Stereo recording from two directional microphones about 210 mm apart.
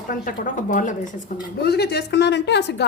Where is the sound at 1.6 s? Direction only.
50° left (ahead or behind).